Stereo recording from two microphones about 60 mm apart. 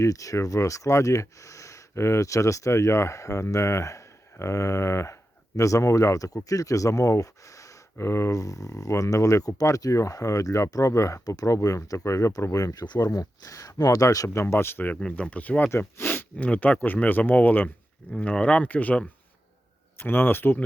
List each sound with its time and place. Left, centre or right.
0.0 s speech: left
5.5 s speech: left
14.3 s speech: left
15.0 s speech: left
15.7 s speech: left
18.2 s speech: left
20.0 s speech: left